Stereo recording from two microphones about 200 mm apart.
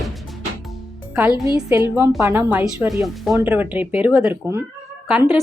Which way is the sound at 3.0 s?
Centre (ahead or behind).